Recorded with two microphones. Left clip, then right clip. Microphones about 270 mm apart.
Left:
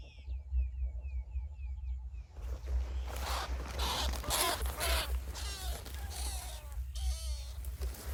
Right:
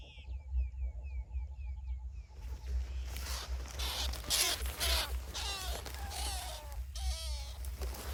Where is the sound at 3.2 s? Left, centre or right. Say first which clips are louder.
Left 6 dB; centre.